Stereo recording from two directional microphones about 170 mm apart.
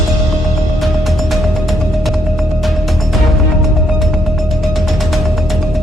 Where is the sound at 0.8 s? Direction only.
Centre (ahead or behind).